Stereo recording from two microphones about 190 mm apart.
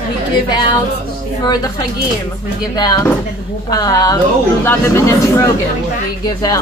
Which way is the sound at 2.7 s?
20° left (ahead or behind).